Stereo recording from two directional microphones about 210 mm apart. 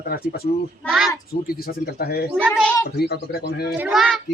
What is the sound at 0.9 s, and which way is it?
Speech, centre (ahead or behind).